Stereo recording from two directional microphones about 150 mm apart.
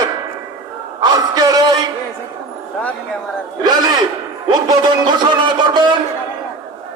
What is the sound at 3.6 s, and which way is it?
A man's voice, 30° right (ahead or behind).